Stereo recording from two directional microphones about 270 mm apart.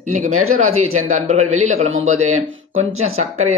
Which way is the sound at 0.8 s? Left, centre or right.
Right.